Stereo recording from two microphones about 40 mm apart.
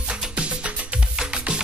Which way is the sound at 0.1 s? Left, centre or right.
Right.